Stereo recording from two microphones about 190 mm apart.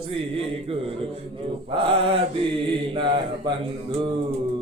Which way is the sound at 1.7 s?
30° right (ahead or behind).